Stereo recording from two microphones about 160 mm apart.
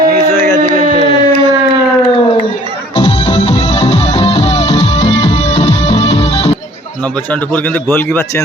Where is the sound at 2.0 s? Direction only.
35° left (ahead or behind).